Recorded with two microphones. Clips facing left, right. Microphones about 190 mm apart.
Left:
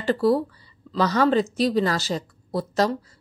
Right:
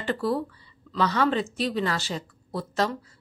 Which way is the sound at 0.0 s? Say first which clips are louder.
Left 6 dB; 40° left (ahead or behind).